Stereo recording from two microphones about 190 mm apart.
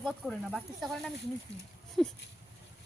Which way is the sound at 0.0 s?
5° right (ahead or behind).